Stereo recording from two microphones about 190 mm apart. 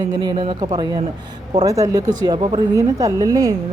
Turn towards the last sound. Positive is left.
turn(degrees=-20)  # may be behind; listen again after turning